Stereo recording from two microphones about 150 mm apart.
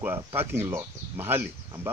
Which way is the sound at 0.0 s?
15° right (ahead or behind).